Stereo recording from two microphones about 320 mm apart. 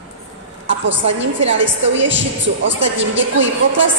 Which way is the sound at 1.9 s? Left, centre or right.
Right.